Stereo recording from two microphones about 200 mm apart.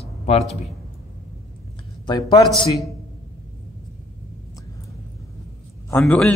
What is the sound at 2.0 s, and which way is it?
Speech, 20° left (ahead or behind).